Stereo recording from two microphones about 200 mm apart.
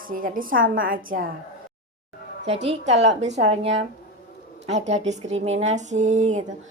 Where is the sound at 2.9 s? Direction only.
60° right (ahead or behind).